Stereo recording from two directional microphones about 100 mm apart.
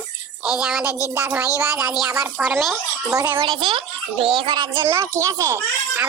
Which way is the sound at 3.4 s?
50° right (ahead or behind).